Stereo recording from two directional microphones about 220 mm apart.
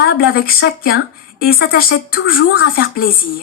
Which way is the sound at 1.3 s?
45° left (ahead or behind).